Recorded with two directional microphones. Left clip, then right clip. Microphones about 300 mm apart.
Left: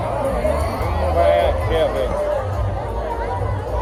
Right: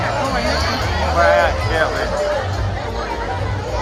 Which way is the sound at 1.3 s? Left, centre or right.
Centre.